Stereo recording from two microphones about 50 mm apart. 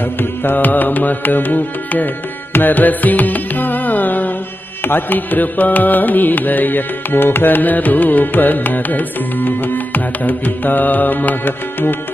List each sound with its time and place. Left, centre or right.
0.2 s music: left